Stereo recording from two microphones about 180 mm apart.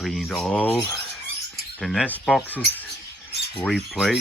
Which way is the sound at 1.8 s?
Centre (ahead or behind).